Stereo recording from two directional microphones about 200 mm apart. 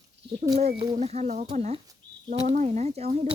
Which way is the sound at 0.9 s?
35° right (ahead or behind).